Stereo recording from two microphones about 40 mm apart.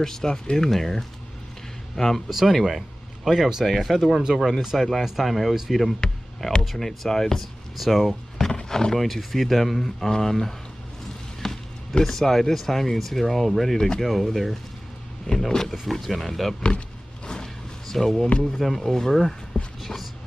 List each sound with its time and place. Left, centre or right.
0.0 s speech: centre
0.7 s speech: centre
2.2 s speech: centre
3.6 s speech: centre
4.2 s speech: centre
5.0 s speech: centre
5.9 s speech: centre
6.6 s speech: centre
7.7 s speech: centre
8.4 s speech: centre
11.4 s music: centre
12.0 s speech: centre
17.3 s a sound: centre
18.6 s speech: centre